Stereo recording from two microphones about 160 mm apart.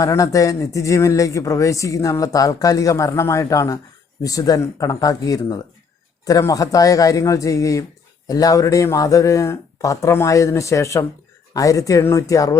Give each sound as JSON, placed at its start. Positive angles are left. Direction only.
{"t": 0.0, "sound": "speech", "side_deg": 20}